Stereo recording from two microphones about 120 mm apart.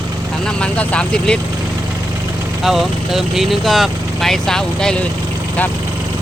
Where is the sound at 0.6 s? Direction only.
10° left (ahead or behind).